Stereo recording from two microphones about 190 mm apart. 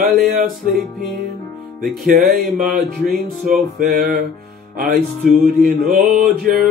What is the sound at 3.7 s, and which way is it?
Music, 50° right (ahead or behind).